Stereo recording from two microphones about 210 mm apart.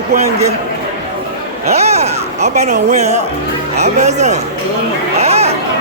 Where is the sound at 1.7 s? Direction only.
30° right (ahead or behind).